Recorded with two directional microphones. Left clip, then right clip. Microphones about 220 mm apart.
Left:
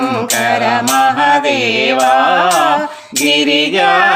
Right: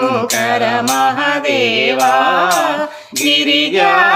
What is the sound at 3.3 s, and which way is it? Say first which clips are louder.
Music: left 1 dB; 5° right (ahead or behind).